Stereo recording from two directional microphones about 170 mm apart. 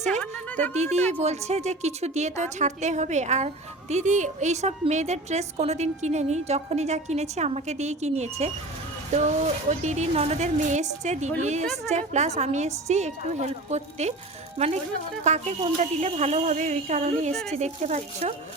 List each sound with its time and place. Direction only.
0.7 s a woman's voice: 40° right (ahead or behind)